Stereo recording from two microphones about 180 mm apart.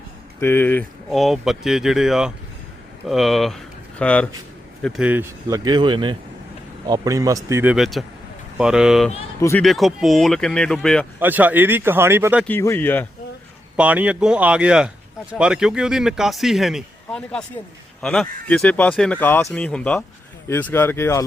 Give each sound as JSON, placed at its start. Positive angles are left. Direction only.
{"t": 0.3, "sound": "speech", "side_deg": 10}
{"t": 1.1, "sound": "a man's voice", "side_deg": 0}
{"t": 5.5, "sound": "a man's voice", "side_deg": -20}
{"t": 9.4, "sound": "speech", "side_deg": 15}
{"t": 9.6, "sound": "a man's voice", "side_deg": 0}
{"t": 11.2, "sound": "speech", "side_deg": -10}
{"t": 12.5, "sound": "speech", "side_deg": 10}
{"t": 13.7, "sound": "a man's voice", "side_deg": -10}